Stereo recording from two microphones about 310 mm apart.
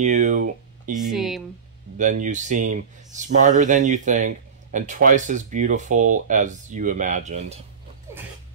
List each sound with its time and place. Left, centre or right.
0.0 s speech: right
0.9 s speech: centre
2.0 s speech: right